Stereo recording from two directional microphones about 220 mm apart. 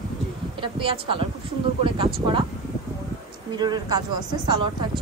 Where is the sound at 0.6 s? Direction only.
25° right (ahead or behind).